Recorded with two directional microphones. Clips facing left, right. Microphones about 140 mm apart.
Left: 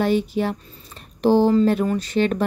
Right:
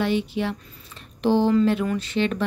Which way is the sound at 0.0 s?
45° left (ahead or behind).